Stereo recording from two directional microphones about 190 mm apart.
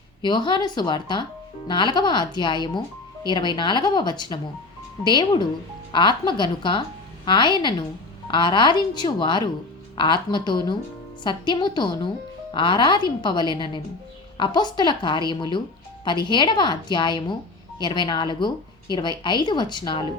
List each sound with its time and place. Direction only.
0.2 s speech: 25° left (ahead or behind)